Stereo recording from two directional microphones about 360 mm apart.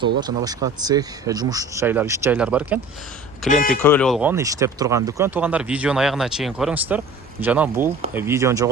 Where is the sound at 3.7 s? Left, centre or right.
Centre.